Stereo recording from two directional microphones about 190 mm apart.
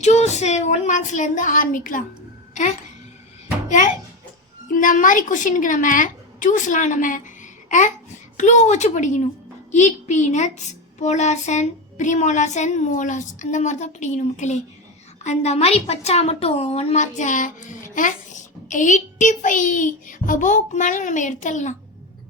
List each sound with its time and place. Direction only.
0.0 s a woman's voice: 35° left (ahead or behind)
3.7 s a child's voice: 40° left (ahead or behind)